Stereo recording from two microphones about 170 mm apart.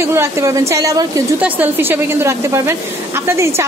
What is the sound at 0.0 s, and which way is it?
A woman's voice, 15° right (ahead or behind).